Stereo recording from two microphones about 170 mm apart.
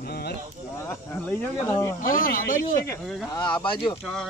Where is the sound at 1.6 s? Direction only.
15° left (ahead or behind).